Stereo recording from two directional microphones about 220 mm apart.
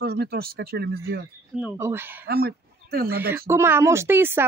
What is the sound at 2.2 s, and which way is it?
Speech, 45° right (ahead or behind).